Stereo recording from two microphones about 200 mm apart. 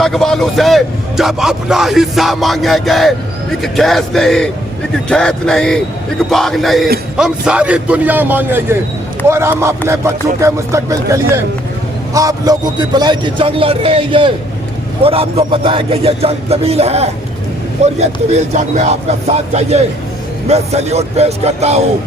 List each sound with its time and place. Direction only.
0.0 s a man's voice: centre (ahead or behind); by 21.8 s 35° right (ahead or behind)